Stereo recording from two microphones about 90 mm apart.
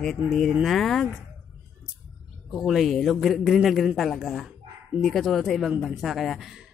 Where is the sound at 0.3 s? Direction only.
Centre (ahead or behind).